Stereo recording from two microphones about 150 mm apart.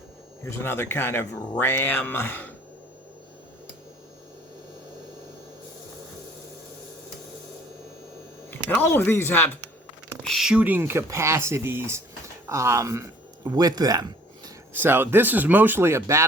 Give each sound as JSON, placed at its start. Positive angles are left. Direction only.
{"t": 0.5, "sound": "speech", "side_deg": 15}
{"t": 8.4, "sound": "speech", "side_deg": 15}
{"t": 10.2, "sound": "speech", "side_deg": 0}
{"t": 14.8, "sound": "speech", "side_deg": -15}